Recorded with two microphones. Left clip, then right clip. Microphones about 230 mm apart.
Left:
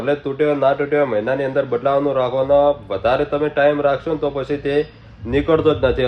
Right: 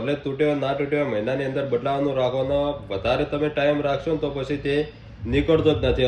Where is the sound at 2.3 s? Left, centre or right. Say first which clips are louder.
Left 8 dB; left.